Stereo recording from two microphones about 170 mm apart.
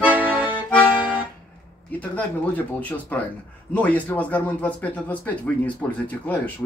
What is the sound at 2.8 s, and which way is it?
Speech, 10° left (ahead or behind).